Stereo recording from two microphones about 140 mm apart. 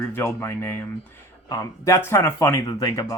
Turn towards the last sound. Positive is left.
turn(degrees=25)  # may be behind; listen again after turning